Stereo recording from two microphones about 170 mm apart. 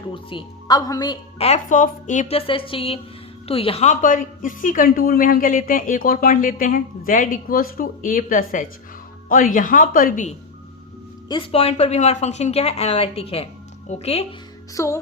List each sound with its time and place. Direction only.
0.1 s a woman's voice: 30° left (ahead or behind); by 10.3 s 50° left (ahead or behind)
11.3 s a woman's voice: 30° left (ahead or behind)
14.7 s speech: 20° left (ahead or behind)